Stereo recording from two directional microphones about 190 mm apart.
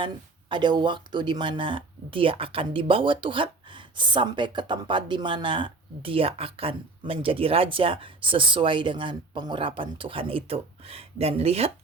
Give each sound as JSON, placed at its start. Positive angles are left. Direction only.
{"t": 0.0, "sound": "speech", "side_deg": -25}